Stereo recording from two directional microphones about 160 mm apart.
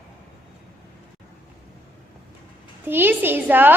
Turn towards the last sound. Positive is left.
turn(degrees=-10)  # may be behind; listen again after turning